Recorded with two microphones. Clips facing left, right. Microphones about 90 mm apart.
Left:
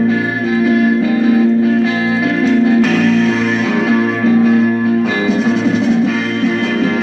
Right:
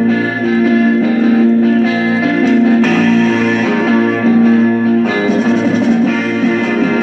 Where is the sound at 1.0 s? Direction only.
40° right (ahead or behind).